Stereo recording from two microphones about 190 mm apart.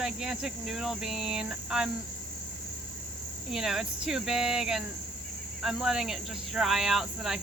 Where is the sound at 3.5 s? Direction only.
Centre (ahead or behind).